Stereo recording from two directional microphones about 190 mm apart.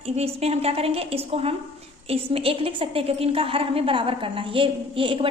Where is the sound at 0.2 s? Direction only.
30° right (ahead or behind).